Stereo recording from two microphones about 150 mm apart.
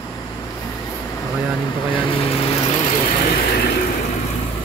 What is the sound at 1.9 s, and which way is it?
Vehicle, 35° left (ahead or behind).